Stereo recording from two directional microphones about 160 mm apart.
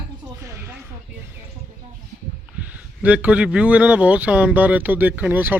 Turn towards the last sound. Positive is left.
turn(degrees=-10)  # may be behind; listen again after turning